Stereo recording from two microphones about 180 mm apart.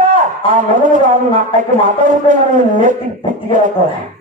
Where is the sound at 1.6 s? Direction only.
45° right (ahead or behind).